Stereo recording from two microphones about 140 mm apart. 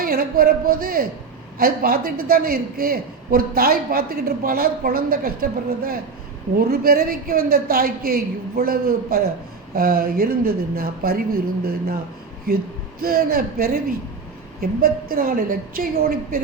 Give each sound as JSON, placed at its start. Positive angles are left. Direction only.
{"t": 0.0, "sound": "a man's voice", "side_deg": -90}